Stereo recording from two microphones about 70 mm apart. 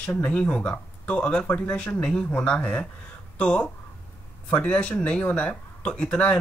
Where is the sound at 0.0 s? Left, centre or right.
Centre.